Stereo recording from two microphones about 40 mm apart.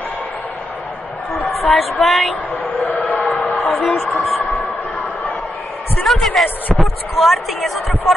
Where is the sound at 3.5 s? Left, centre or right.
Left.